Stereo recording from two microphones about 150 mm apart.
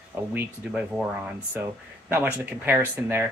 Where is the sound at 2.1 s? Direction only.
15° right (ahead or behind).